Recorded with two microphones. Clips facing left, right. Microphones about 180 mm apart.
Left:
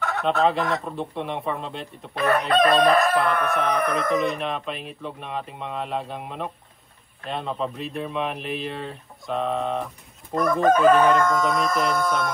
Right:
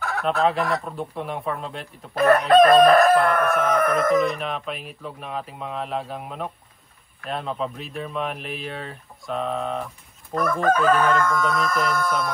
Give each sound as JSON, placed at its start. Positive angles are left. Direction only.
{"t": 0.0, "sound": "speech", "side_deg": 0}
{"t": 10.3, "sound": "chicken", "side_deg": 20}
{"t": 10.9, "sound": "speech", "side_deg": 0}